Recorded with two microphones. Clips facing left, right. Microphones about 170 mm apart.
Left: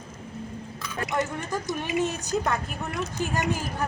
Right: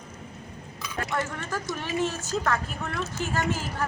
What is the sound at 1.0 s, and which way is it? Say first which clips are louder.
A woman's voice: left 3 dB; 15° left (ahead or behind).